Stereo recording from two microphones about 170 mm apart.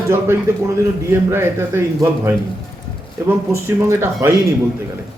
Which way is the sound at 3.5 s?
15° right (ahead or behind).